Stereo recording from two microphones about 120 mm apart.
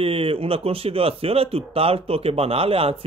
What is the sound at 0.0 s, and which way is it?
Speech, 50° right (ahead or behind).